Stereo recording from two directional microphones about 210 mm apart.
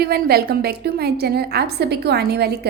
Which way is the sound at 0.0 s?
45° right (ahead or behind).